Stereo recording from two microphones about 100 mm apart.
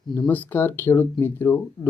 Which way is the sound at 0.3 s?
20° left (ahead or behind).